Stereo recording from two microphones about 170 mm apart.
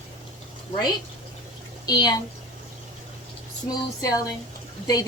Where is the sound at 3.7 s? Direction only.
20° left (ahead or behind).